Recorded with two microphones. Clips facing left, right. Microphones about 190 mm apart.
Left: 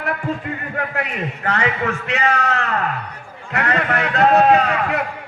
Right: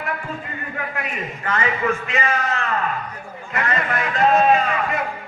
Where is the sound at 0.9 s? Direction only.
75° left (ahead or behind).